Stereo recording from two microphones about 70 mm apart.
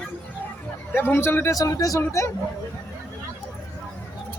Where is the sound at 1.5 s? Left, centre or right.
Left.